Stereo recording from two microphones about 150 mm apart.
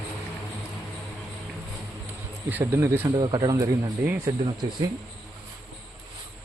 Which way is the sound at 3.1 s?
30° right (ahead or behind).